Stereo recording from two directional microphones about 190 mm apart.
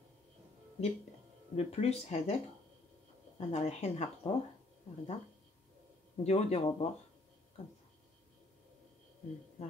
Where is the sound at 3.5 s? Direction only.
35° left (ahead or behind).